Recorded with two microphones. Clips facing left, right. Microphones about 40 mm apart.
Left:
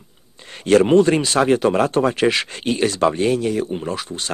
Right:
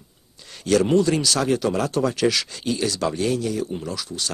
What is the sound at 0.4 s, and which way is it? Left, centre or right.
Speech, left.